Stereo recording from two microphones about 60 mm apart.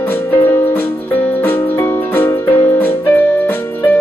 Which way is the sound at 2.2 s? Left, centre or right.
Left.